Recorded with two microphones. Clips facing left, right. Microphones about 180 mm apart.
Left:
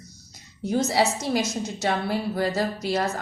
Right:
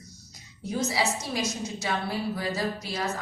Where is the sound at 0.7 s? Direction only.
45° left (ahead or behind).